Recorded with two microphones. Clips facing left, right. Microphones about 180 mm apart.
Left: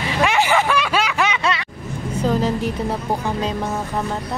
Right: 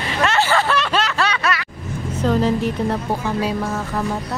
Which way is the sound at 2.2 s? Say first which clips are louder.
Right 2 dB; 5° left (ahead or behind).